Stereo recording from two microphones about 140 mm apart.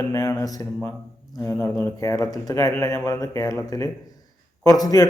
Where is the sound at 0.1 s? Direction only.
25° left (ahead or behind).